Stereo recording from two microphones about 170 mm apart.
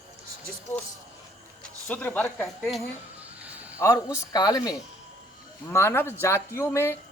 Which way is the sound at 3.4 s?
10° right (ahead or behind).